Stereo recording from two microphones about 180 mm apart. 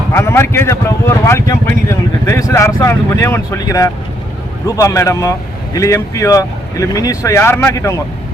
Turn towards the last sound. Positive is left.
turn(degrees=15)  # may be behind; listen again after turning